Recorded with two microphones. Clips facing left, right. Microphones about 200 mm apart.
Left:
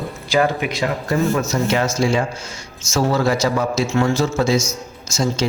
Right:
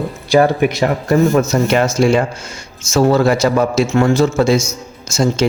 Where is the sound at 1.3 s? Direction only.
45° right (ahead or behind).